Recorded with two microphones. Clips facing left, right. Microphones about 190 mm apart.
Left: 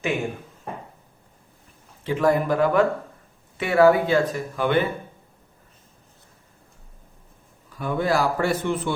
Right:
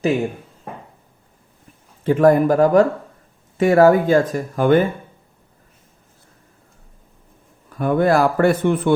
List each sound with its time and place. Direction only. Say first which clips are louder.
2.0 s speech: right 7 dB; 50° right (ahead or behind)
7.7 s speech: right 7 dB; 55° right (ahead or behind)